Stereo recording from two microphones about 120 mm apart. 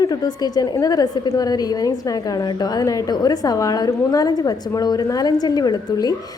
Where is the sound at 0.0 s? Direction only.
30° left (ahead or behind).